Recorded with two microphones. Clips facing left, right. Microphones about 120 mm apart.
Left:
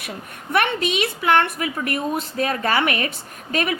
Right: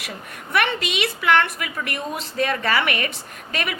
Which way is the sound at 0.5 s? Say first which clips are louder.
Left 2 dB; 45° left (ahead or behind).